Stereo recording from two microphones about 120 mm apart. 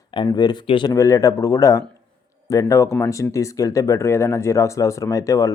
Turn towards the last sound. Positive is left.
turn(degrees=30)  # may be behind; listen again after turning